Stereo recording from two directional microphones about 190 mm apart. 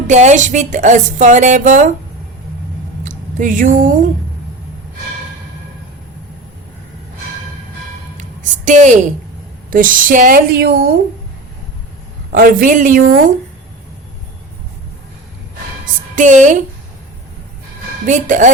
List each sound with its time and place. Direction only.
0.1 s speech: 40° right (ahead or behind)
3.0 s a sound: 45° right (ahead or behind)
8.2 s a sound: 40° right (ahead or behind)
9.6 s speech: 45° right (ahead or behind)
12.3 s speech: 50° right (ahead or behind)
16.1 s speech: 40° right (ahead or behind)
18.0 s speech: 40° right (ahead or behind)